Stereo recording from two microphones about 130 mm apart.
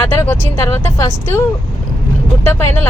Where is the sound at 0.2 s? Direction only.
25° left (ahead or behind).